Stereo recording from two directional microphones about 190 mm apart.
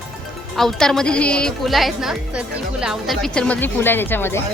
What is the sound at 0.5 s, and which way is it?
A woman's voice, centre (ahead or behind).